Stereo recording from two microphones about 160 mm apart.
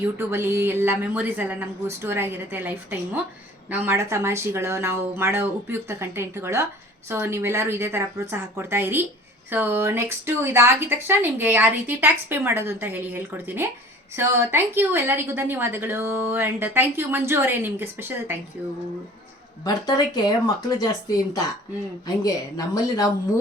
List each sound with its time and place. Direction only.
0.0 s a woman's voice: 15° right (ahead or behind)
19.6 s speech: 25° left (ahead or behind)
22.0 s speech: 20° left (ahead or behind)